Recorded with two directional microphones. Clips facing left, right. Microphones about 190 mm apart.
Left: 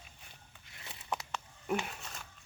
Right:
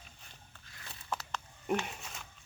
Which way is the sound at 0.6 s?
20° left (ahead or behind).